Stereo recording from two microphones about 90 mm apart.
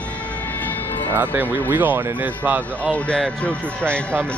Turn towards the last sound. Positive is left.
turn(degrees=15)  # may be behind; listen again after turning